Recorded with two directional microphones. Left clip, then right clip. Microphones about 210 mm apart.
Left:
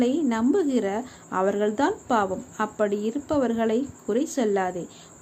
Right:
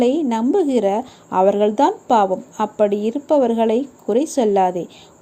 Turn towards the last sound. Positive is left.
turn(degrees=-20)  # may be behind; listen again after turning